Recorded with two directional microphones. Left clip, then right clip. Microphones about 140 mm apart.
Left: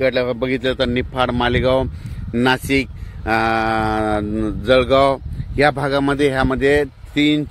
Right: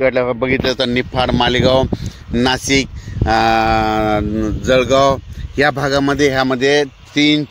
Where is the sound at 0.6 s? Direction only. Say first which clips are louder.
Right 3 dB; 40° right (ahead or behind).